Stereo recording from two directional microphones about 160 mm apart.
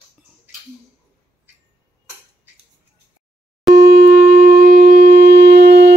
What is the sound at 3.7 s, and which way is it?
Shofar, 85° right.